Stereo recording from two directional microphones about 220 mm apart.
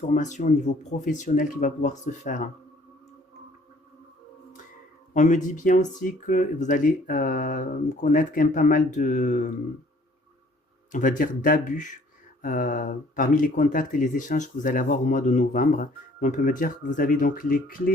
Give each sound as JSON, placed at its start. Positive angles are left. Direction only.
{"t": 0.1, "sound": "speech", "side_deg": 35}
{"t": 5.1, "sound": "speech", "side_deg": 35}
{"t": 10.9, "sound": "speech", "side_deg": 35}